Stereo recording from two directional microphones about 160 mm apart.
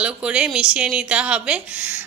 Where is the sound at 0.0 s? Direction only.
5° right (ahead or behind).